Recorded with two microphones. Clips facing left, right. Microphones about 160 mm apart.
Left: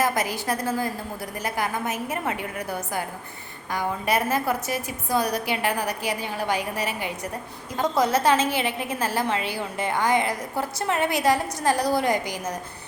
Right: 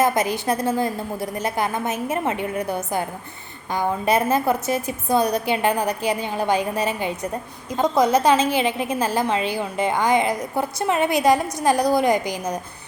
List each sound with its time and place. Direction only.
0.0 s a woman's voice: 20° right (ahead or behind)